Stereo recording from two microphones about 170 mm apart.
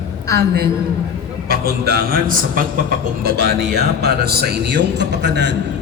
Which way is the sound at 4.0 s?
70° right (ahead or behind).